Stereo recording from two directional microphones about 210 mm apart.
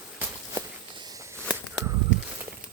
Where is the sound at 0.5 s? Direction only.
20° right (ahead or behind).